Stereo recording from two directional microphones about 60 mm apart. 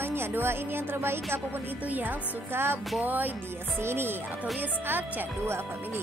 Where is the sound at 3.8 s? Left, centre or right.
Right.